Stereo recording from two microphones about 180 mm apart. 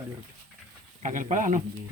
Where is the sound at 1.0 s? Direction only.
45° right (ahead or behind).